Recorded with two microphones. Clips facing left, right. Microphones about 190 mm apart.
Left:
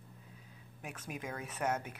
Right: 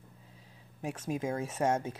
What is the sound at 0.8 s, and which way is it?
Speech, 25° right (ahead or behind).